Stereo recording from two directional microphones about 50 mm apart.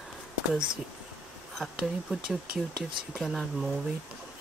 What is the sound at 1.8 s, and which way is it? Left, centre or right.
Speech, centre.